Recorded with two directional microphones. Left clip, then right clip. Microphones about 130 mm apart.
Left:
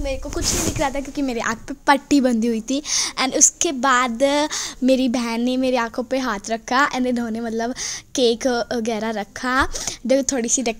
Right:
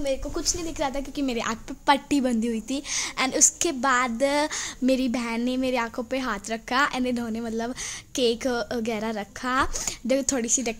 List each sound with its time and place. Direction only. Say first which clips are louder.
0.0 s a woman's voice: left 2 dB; 30° left (ahead or behind)